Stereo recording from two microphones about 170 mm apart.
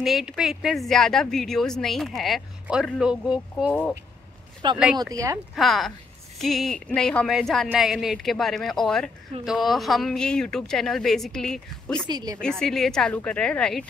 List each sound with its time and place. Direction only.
0.0 s a woman's voice: centre (ahead or behind)
4.6 s speech: 25° right (ahead or behind)
5.6 s a woman's voice: centre (ahead or behind)
12.1 s speech: 25° right (ahead or behind)
12.4 s a woman's voice: 5° left (ahead or behind)